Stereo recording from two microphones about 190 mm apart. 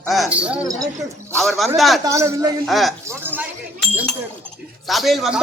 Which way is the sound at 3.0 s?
10° right (ahead or behind).